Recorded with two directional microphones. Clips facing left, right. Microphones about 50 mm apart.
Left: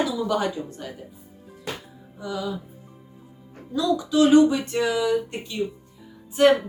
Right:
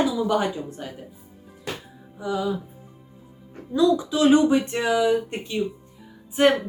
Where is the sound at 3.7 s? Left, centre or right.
Centre.